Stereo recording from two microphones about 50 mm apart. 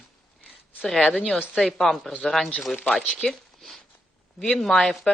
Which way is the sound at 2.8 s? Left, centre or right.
Centre.